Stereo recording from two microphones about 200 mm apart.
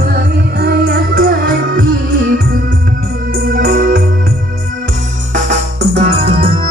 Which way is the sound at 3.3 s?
45° right (ahead or behind).